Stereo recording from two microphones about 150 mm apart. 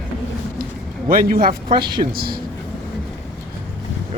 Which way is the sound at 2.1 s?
80° right.